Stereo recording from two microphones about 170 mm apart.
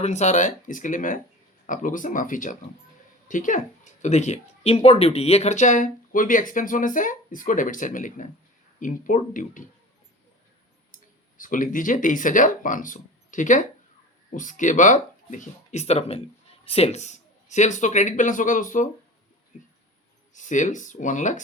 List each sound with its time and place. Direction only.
0.0 s speech: 40° left (ahead or behind)
10.9 s speech: 55° left (ahead or behind)
20.3 s speech: 45° left (ahead or behind)